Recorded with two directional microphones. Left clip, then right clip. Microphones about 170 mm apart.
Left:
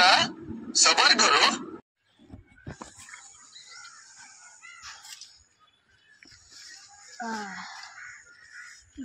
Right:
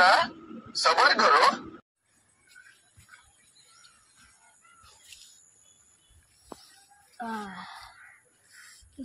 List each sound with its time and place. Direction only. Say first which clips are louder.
0.0 s radio: even; 15° left (ahead or behind)
7.2 s speech: left 1 dB; 45° right (ahead or behind)